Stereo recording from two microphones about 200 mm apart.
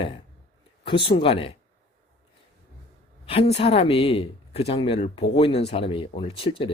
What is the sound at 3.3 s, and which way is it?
Speech, 30° left (ahead or behind).